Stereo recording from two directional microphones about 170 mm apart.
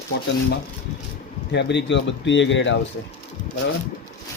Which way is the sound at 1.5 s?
90° left.